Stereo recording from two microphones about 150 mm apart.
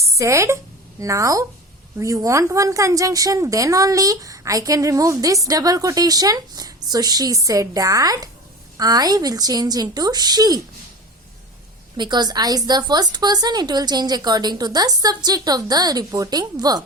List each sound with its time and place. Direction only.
0.0 s a woman's voice: 20° right (ahead or behind)
11.9 s a woman's voice: 30° right (ahead or behind)